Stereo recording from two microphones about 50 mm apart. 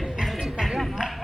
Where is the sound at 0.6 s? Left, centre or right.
Centre.